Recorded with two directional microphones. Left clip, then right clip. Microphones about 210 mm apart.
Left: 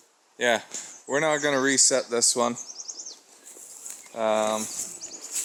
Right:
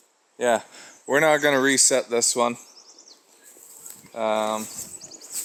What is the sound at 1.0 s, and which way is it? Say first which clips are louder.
Speech: right 5 dB; 50° right (ahead or behind).